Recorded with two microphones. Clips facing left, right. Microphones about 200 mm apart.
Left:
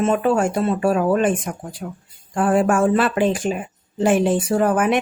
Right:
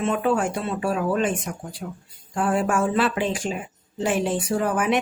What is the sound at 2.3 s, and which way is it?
Speech, 50° left (ahead or behind).